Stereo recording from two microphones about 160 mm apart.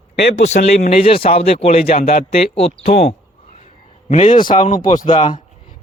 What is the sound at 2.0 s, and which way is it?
Speech, 65° left (ahead or behind).